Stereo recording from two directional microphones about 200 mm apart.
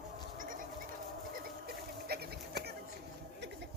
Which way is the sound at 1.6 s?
50° right (ahead or behind).